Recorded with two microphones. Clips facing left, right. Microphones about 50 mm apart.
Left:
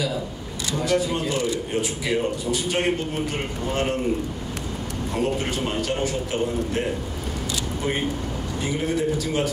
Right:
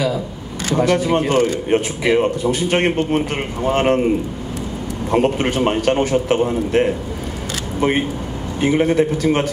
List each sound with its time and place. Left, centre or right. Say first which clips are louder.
0.7 s speech: right 7 dB; right
5.1 s speech: right 9 dB; right
8.5 s speech: right 10 dB; right